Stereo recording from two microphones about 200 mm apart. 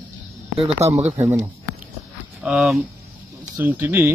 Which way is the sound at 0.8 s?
30° right (ahead or behind).